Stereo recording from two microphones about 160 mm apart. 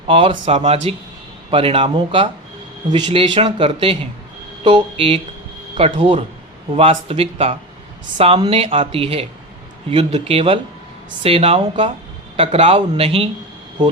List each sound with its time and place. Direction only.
0.1 s speech: 35° right (ahead or behind)